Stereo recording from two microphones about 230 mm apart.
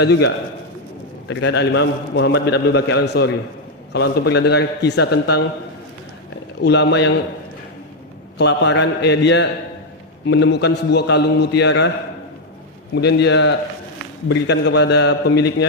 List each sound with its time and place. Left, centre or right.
0.0 s a man's voice: left
1.3 s a man's voice: left
6.6 s a man's voice: left
8.4 s a man's voice: left
12.9 s a man's voice: left